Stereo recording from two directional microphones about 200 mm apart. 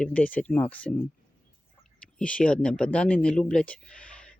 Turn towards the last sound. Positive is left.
turn(degrees=5)  # may be behind; listen again after turning